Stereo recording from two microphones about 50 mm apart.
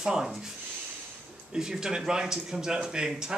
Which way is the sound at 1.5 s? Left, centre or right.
Centre.